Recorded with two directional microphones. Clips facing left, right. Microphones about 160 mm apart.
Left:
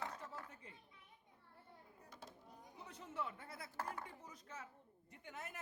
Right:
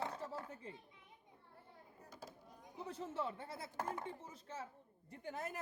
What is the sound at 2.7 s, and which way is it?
Speech, 30° right (ahead or behind).